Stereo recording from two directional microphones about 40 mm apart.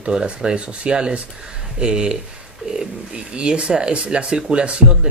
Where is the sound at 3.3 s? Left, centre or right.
Right.